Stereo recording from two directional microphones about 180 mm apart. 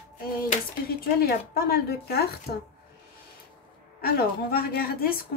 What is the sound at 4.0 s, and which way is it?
A woman's voice, 60° left (ahead or behind).